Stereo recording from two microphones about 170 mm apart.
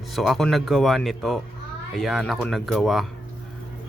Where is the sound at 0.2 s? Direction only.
Centre (ahead or behind).